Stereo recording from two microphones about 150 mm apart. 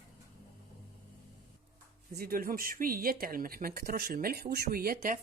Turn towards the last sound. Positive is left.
turn(degrees=-70)  # may be behind; listen again after turning